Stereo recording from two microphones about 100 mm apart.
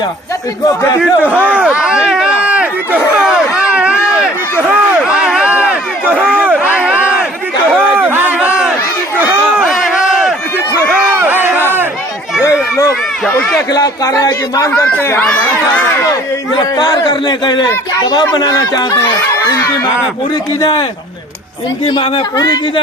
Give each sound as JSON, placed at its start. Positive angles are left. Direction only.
{"t": 1.2, "sound": "run", "side_deg": -15}
{"t": 4.7, "sound": "a sound", "side_deg": -10}
{"t": 11.2, "sound": "crowd", "side_deg": -20}
{"t": 13.7, "sound": "speech", "side_deg": 40}
{"t": 14.7, "sound": "speech", "side_deg": 10}
{"t": 16.6, "sound": "speech", "side_deg": 45}
{"t": 20.6, "sound": "speech", "side_deg": 45}